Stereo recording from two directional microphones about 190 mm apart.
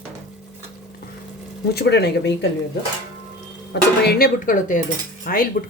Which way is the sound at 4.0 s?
55° left (ahead or behind).